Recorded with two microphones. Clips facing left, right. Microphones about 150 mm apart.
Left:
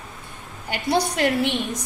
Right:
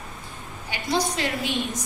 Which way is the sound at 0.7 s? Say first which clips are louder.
Left 3 dB; 60° left (ahead or behind).